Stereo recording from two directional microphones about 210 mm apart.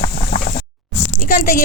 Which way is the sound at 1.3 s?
40° left (ahead or behind).